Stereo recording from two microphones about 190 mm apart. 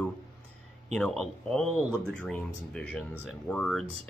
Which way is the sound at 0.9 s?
Centre (ahead or behind).